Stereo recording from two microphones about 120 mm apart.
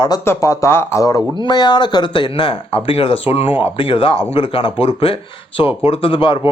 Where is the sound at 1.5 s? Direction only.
40° left (ahead or behind).